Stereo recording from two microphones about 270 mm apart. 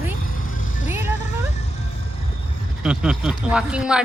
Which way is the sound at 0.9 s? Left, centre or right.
Centre.